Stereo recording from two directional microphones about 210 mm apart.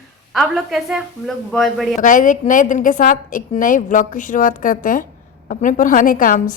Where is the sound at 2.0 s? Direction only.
40° left (ahead or behind).